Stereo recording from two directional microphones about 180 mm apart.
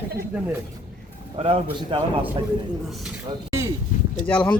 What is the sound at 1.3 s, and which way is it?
Speech, 30° right (ahead or behind).